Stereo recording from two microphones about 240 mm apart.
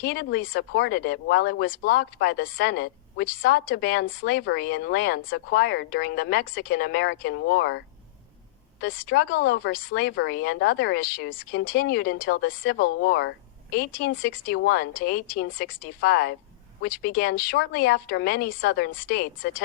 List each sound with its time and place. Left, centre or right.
0.0 s speech: left
8.8 s speech: left